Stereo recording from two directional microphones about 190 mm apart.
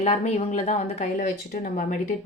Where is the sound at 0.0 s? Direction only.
35° left (ahead or behind).